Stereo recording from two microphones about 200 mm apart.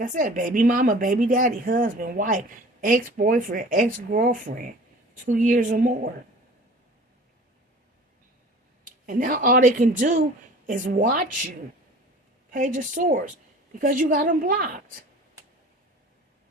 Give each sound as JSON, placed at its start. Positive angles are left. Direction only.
{"t": 0.0, "sound": "a woman's voice", "side_deg": -40}
{"t": 9.0, "sound": "a woman's voice", "side_deg": -45}
{"t": 12.5, "sound": "a woman's voice", "side_deg": -40}